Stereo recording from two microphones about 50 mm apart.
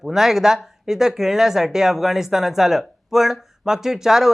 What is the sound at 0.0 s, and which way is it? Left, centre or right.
Speech, centre.